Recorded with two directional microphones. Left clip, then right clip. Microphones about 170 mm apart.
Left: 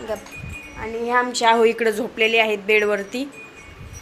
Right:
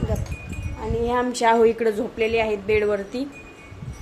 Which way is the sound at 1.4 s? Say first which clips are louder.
Even; 15° right (ahead or behind).